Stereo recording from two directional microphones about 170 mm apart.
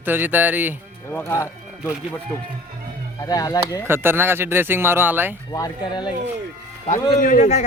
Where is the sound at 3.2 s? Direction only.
20° left (ahead or behind).